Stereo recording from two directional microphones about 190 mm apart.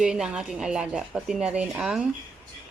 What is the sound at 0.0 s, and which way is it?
Speech, 5° right (ahead or behind).